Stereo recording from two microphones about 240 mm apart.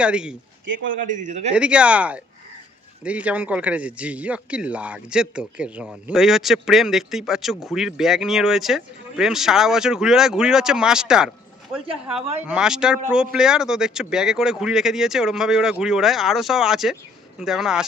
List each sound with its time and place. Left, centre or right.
0.0 s speech: centre
0.6 s a man's voice: right
1.0 s a man's voice: right
1.5 s speech: centre